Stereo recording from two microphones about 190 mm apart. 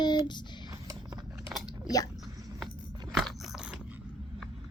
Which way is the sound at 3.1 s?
5° right (ahead or behind).